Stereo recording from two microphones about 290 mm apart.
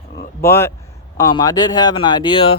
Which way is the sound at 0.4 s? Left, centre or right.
Centre.